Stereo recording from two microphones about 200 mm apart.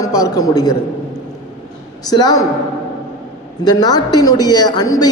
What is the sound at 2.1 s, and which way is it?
Speech, 20° left (ahead or behind).